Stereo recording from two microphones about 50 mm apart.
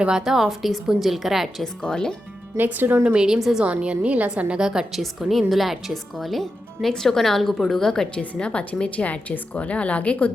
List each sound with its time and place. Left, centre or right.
0.0 s a woman's voice: centre
1.8 s a woman's voice: centre
2.6 s a woman's voice: right
3.2 s a woman's voice: centre
3.6 s a woman's voice: right; by 8.0 s centre
8.1 s a woman's voice: centre